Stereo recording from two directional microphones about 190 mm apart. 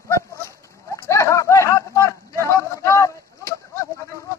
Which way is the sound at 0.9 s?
15° left (ahead or behind).